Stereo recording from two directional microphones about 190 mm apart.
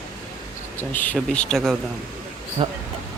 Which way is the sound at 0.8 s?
10° left (ahead or behind).